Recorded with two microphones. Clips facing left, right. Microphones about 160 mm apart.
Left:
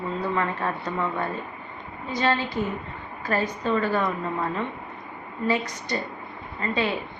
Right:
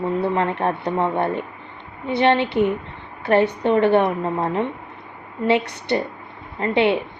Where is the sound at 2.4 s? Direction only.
70° right (ahead or behind).